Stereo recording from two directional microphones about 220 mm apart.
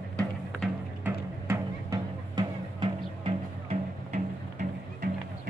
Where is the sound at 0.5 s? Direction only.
5° right (ahead or behind); by 5.1 s 35° right (ahead or behind).